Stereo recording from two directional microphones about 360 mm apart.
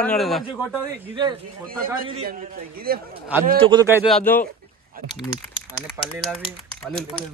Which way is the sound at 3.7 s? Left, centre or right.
Centre.